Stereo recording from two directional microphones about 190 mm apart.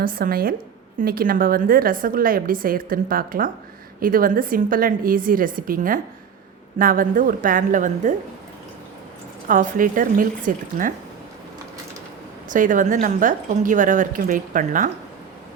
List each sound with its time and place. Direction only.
0.0 s a woman's voice: 50° right (ahead or behind)
9.5 s a woman's voice: 45° right (ahead or behind)
12.5 s a woman's voice: 45° right (ahead or behind)